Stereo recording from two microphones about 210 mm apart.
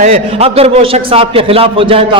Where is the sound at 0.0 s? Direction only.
30° right (ahead or behind).